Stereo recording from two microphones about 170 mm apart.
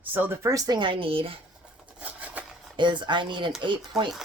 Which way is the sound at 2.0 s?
10° right (ahead or behind).